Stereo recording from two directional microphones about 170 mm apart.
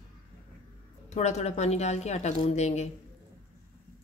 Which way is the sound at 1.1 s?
40° left (ahead or behind).